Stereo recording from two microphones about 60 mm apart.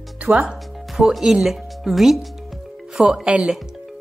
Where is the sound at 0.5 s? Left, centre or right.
Centre.